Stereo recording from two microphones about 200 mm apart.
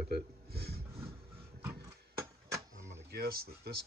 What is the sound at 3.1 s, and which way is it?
Speech, 50° right (ahead or behind).